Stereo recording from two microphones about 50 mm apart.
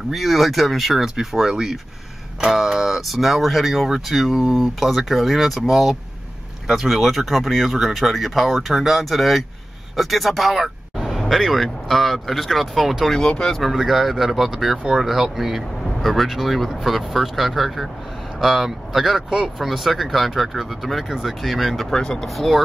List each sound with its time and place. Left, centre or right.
0.1 s speech: centre
13.2 s speech: centre
13.6 s speech: centre
21.9 s speech: centre
22.2 s speech: centre